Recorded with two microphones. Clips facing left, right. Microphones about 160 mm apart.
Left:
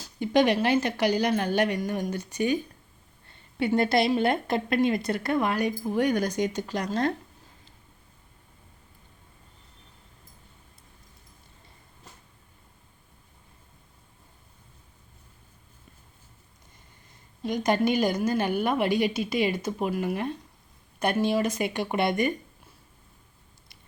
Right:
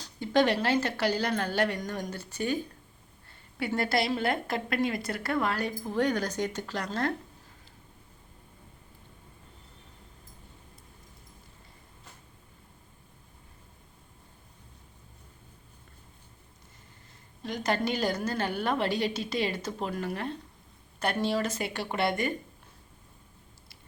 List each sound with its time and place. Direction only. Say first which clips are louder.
0.2 s a woman's voice: left 3 dB; 15° left (ahead or behind)
17.4 s a woman's voice: left 5 dB; 15° left (ahead or behind)